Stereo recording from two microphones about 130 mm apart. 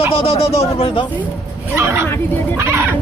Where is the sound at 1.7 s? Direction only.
20° right (ahead or behind).